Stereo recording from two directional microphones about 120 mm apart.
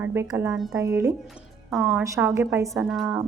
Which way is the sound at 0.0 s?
20° right (ahead or behind).